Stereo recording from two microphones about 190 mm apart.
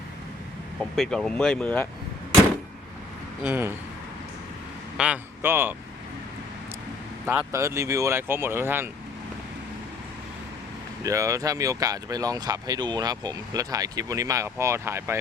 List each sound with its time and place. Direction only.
0.8 s speech: centre (ahead or behind)
3.4 s speech: 10° right (ahead or behind)
4.9 s speech: 5° right (ahead or behind)
7.3 s speech: 10° right (ahead or behind)
11.0 s speech: 15° right (ahead or behind)